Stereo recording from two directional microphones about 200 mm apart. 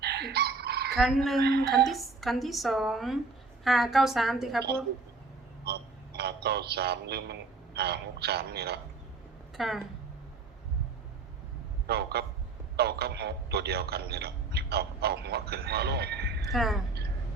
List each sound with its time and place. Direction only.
0.0 s fowl: 55° right (ahead or behind)
0.9 s a woman's voice: centre (ahead or behind)
1.4 s speech: 55° right (ahead or behind)
1.8 s a woman's voice: centre (ahead or behind)
6.1 s speech: 55° right (ahead or behind)
9.6 s a woman's voice: centre (ahead or behind)
11.9 s speech: 55° right (ahead or behind)
16.5 s a woman's voice: centre (ahead or behind)